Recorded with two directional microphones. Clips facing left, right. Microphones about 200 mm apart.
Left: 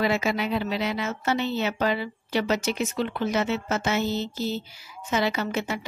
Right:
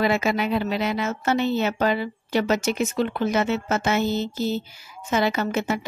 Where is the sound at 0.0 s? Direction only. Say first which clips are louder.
Right 3 dB; 50° right (ahead or behind).